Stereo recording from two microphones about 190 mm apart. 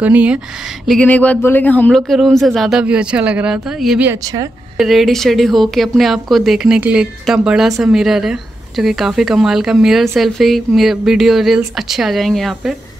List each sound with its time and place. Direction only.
0.0 s speech: 5° right (ahead or behind)
0.8 s a man's voice: 5° left (ahead or behind)
4.2 s a woman's voice: 20° right (ahead or behind)
4.7 s a man's voice: centre (ahead or behind)